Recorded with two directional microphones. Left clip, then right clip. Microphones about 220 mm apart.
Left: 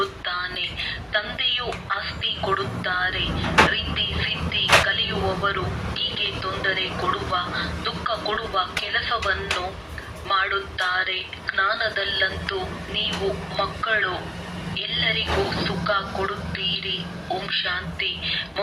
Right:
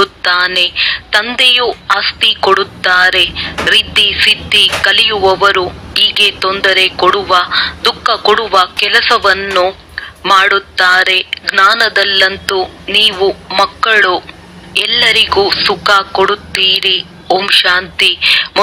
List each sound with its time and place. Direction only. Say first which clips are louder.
0.0 s speech: right 15 dB; 45° right (ahead or behind)